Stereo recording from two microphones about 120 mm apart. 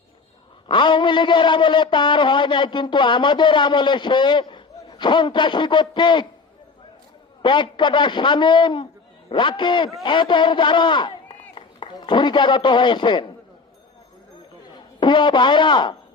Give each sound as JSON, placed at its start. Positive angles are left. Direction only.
{"t": 0.7, "sound": "a man's voice", "side_deg": 40}
{"t": 7.4, "sound": "a man's voice", "side_deg": 40}
{"t": 14.7, "sound": "a man's voice", "side_deg": 40}